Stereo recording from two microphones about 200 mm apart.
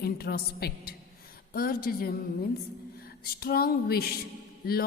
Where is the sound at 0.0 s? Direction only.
50° left (ahead or behind).